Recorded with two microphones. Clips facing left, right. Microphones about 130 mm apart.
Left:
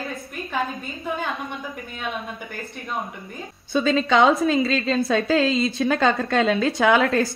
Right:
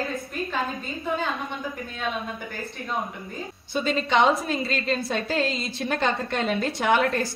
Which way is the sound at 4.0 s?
90° left.